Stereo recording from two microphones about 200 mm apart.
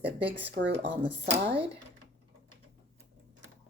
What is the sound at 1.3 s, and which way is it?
Speech, 25° right (ahead or behind).